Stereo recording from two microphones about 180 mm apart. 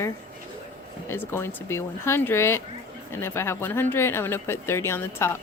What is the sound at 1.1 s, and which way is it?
Speech, 15° left (ahead or behind).